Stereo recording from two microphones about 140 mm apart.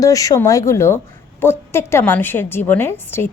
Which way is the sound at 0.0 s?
25° left (ahead or behind).